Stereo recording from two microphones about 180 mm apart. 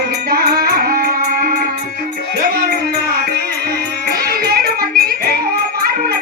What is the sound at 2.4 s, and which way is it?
Music, 55° right (ahead or behind).